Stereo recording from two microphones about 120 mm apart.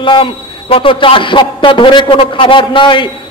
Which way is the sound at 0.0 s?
45° left (ahead or behind).